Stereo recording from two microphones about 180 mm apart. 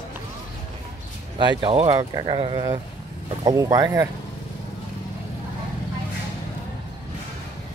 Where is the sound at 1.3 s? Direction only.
30° right (ahead or behind).